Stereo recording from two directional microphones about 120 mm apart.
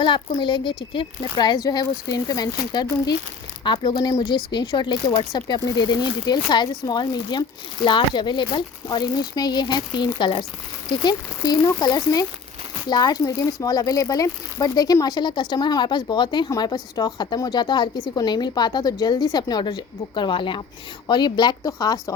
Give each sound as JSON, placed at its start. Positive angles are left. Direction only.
{"t": 0.0, "sound": "a woman's voice", "side_deg": 45}